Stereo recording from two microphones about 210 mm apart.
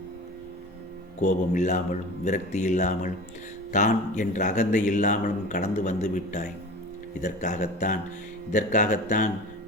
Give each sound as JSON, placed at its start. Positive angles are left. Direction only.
{"t": 1.2, "sound": "speech", "side_deg": 35}